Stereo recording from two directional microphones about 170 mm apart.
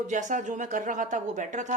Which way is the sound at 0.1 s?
45° right (ahead or behind).